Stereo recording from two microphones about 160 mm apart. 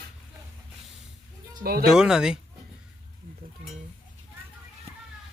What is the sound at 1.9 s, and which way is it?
Speech, 5° right (ahead or behind).